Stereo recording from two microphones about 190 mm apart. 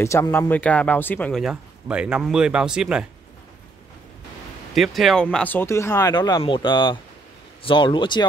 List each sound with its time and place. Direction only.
0.0 s speech: 15° left (ahead or behind); by 3.1 s 5° right (ahead or behind)
4.7 s speech: centre (ahead or behind); by 8.3 s 25° left (ahead or behind)